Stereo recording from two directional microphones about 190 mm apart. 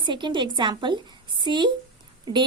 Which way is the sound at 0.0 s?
25° right (ahead or behind).